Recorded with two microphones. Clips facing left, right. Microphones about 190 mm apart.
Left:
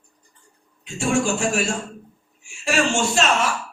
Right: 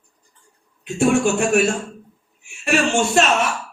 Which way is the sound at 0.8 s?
60° right (ahead or behind).